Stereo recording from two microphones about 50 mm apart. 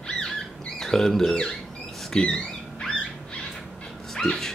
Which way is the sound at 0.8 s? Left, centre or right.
Centre.